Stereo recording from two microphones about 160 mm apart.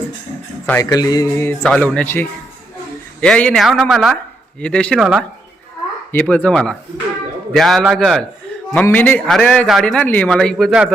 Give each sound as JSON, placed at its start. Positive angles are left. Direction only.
{"t": 0.8, "sound": "music", "side_deg": 25}
{"t": 1.8, "sound": "a man's voice", "side_deg": 10}
{"t": 6.1, "sound": "a man's voice", "side_deg": 10}